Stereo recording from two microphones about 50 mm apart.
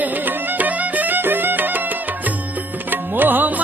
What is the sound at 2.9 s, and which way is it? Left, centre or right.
Music, right.